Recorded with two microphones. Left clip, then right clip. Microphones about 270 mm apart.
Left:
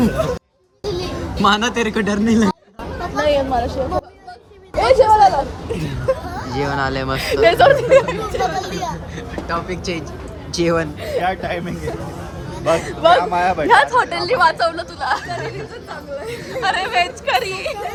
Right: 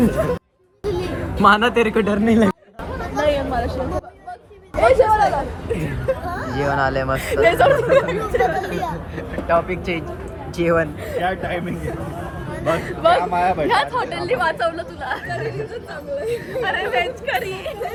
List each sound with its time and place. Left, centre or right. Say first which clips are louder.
0.9 s music: even; left
1.4 s speech: right 2 dB; centre
3.2 s chatter: left 3 dB; left
4.9 s speech: left 4 dB; left
6.5 s speech: right 1 dB; centre
7.2 s speech: left 4 dB; left
9.5 s speech: right 5 dB; centre
11.0 s a man's voice: left 2 dB; left